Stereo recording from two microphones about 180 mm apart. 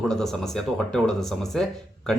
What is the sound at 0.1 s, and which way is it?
Speech, centre (ahead or behind).